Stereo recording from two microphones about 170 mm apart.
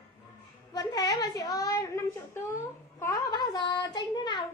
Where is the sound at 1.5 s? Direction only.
20° left (ahead or behind).